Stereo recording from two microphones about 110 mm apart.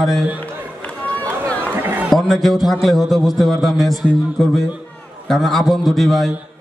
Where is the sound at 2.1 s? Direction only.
Centre (ahead or behind).